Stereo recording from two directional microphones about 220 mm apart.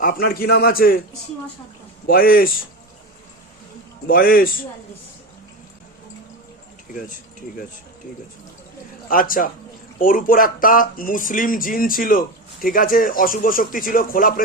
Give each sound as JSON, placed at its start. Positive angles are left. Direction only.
{"t": 0.0, "sound": "a man's voice", "side_deg": 45}
{"t": 2.0, "sound": "speech", "side_deg": 40}
{"t": 4.0, "sound": "speech", "side_deg": 40}
{"t": 9.0, "sound": "speech", "side_deg": 40}